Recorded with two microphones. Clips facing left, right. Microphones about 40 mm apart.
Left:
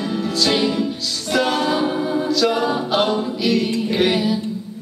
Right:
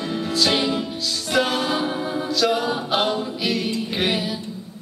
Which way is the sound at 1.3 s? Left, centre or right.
Centre.